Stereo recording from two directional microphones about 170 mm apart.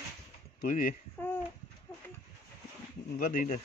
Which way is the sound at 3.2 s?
55° left (ahead or behind).